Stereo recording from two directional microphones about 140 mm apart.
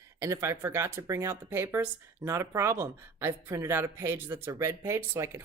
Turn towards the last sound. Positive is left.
turn(degrees=-20)  # may be behind; listen again after turning